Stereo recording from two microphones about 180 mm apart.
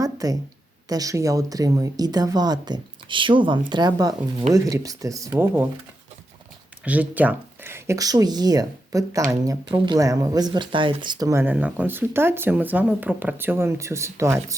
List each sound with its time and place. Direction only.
0.0 s a sound: 20° right (ahead or behind)
0.9 s speech: 20° right (ahead or behind)
6.8 s speech: 10° right (ahead or behind)